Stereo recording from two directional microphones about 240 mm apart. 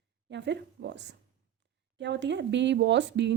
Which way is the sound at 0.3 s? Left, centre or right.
Right.